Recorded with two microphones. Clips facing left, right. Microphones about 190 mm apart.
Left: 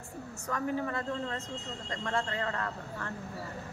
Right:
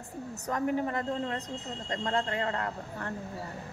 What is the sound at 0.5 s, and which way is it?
A woman's voice, 20° right (ahead or behind).